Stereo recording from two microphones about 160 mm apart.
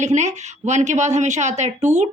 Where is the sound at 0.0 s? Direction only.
45° right (ahead or behind).